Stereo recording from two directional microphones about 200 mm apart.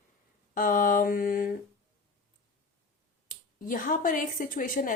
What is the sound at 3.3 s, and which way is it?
Speech, 40° left (ahead or behind).